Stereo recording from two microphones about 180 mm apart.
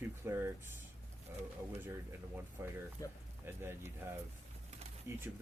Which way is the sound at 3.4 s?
15° right (ahead or behind).